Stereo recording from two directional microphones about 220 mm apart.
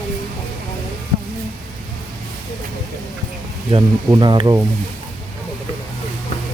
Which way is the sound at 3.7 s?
20° right (ahead or behind).